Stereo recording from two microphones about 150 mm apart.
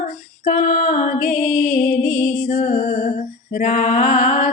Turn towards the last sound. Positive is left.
turn(degrees=55)  # may be behind; listen again after turning